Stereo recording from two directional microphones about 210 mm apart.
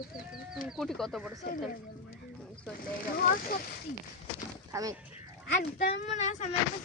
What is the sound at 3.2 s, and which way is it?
Speech, 40° left (ahead or behind).